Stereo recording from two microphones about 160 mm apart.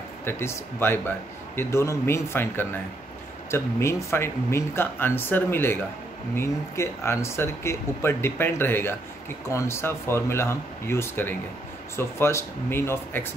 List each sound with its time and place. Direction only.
0.2 s speech: 15° left (ahead or behind)